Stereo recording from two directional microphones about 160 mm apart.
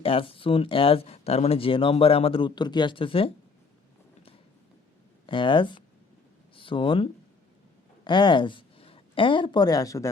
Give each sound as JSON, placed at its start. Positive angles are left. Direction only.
{"t": 0.0, "sound": "speech", "side_deg": 35}
{"t": 5.2, "sound": "speech", "side_deg": 30}